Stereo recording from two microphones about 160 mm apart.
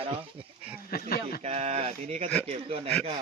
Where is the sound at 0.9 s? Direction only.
70° left (ahead or behind).